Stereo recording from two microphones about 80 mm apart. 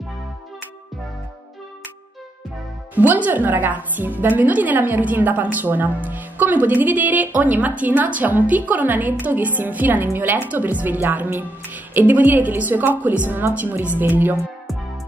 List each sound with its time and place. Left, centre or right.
2.9 s a woman's voice: right